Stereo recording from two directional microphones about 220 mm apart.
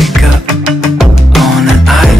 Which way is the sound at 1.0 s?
Centre (ahead or behind).